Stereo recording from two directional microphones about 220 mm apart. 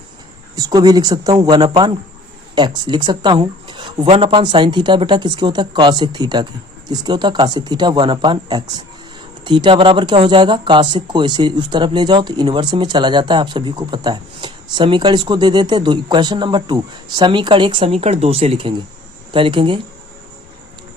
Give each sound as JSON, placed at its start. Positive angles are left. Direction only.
{"t": 0.5, "sound": "speech", "side_deg": -15}